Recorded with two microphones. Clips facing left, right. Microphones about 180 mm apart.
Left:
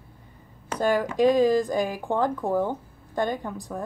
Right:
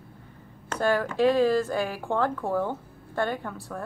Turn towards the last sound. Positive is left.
turn(degrees=15)  # may be behind; listen again after turning